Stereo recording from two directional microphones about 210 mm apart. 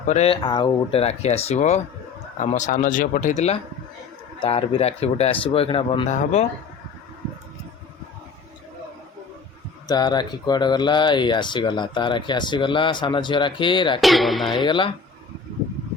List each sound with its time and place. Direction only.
0.0 s speech: 30° left (ahead or behind)
0.4 s speech: 20° left (ahead or behind)
9.8 s speech: 20° left (ahead or behind)
14.0 s speech: centre (ahead or behind)
14.4 s speech: 20° left (ahead or behind)